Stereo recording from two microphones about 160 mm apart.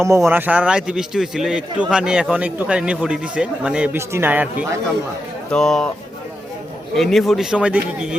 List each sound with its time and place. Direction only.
0.3 s a man's voice: 10° right (ahead or behind)
5.5 s a man's voice: 5° left (ahead or behind)
6.9 s a man's voice: centre (ahead or behind)